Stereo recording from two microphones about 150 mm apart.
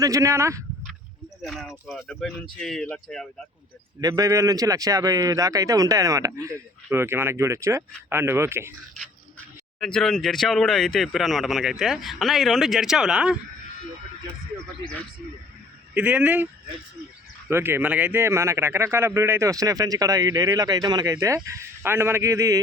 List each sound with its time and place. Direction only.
0.0 s speech: 20° right (ahead or behind)
1.4 s speech: centre (ahead or behind)
4.0 s speech: 25° right (ahead or behind)
9.8 s speech: 5° left (ahead or behind)
16.0 s speech: 10° right (ahead or behind)
17.5 s speech: 15° right (ahead or behind)